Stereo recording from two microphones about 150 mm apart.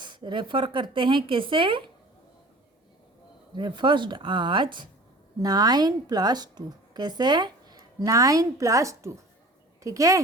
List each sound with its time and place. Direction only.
0.0 s speech: 30° right (ahead or behind)
3.5 s a woman's voice: 30° right (ahead or behind)